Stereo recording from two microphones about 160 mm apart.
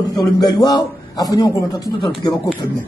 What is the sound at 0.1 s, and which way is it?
A man's voice, 25° left (ahead or behind).